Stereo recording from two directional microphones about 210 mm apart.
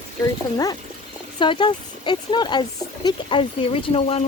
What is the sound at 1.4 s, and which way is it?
Speech, 25° left (ahead or behind).